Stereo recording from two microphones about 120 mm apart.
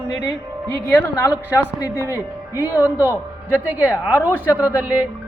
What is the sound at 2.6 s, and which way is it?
A man's voice, 15° right (ahead or behind).